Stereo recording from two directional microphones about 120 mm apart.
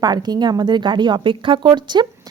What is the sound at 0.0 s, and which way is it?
A woman's voice, 35° right (ahead or behind).